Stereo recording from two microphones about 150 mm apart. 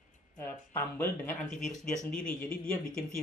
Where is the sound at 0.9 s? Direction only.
10° left (ahead or behind).